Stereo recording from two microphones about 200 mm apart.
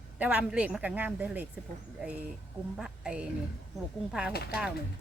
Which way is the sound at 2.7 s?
5° right (ahead or behind).